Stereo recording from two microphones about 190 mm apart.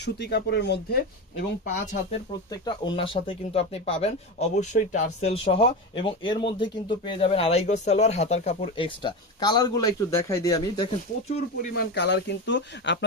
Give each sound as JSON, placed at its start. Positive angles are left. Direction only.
{"t": 0.0, "sound": "speech", "side_deg": 60}
{"t": 1.6, "sound": "speech", "side_deg": 40}
{"t": 2.3, "sound": "speech", "side_deg": 20}
{"t": 11.7, "sound": "speech", "side_deg": 60}